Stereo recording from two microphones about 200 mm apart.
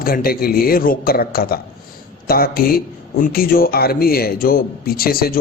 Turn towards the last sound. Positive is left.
turn(degrees=50)  # may be behind; listen again after turning